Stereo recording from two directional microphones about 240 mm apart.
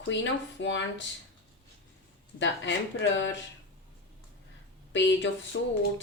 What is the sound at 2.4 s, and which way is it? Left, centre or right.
Speech, left.